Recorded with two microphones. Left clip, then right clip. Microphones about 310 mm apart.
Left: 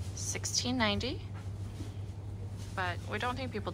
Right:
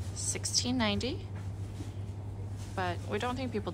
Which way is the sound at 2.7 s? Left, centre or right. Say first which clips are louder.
Right 1 dB; centre.